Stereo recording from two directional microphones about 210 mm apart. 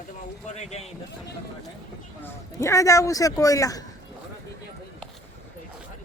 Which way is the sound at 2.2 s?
15° left (ahead or behind).